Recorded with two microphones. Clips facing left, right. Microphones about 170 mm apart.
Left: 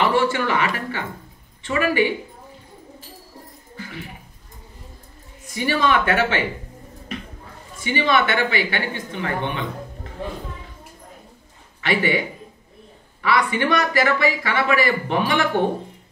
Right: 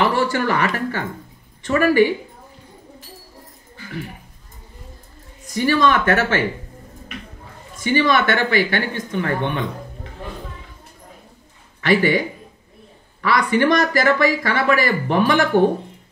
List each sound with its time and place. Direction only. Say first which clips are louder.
0.0 s speech: right 1 dB; 40° right (ahead or behind)
5.5 s speech: right 3 dB; 45° right (ahead or behind)
7.8 s speech: right 3 dB; 45° right (ahead or behind)
11.8 s speech: right 4 dB; 40° right (ahead or behind)
13.2 s speech: right 3 dB; 40° right (ahead or behind)